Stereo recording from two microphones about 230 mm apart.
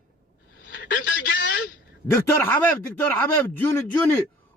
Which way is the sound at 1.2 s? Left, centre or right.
Left.